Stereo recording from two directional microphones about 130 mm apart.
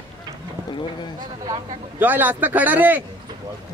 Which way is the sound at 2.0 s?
15° right (ahead or behind).